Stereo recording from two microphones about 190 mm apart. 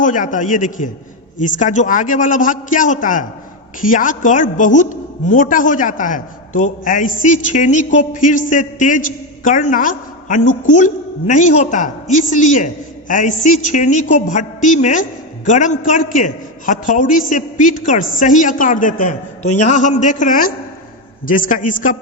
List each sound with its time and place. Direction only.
0.0 s a woman's voice: 40° left (ahead or behind)